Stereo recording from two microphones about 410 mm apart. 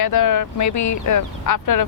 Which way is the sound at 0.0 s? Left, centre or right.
Left.